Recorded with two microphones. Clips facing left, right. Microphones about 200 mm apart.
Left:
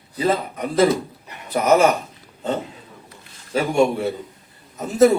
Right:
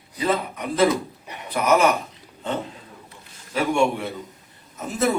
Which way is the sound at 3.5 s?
40° left (ahead or behind).